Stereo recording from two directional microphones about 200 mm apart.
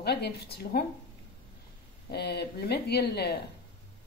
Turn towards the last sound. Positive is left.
turn(degrees=55)  # may be behind; listen again after turning